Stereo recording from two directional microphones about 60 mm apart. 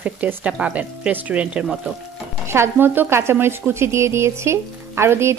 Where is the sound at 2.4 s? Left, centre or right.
Right.